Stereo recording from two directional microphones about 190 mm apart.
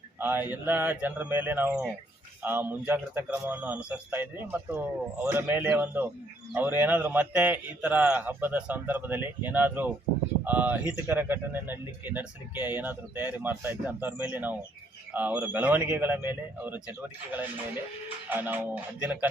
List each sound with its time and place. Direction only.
0.2 s speech: 10° right (ahead or behind)
18.3 s speech: 10° right (ahead or behind)